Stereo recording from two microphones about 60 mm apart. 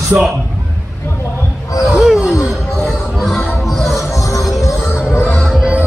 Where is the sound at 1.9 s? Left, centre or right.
Centre.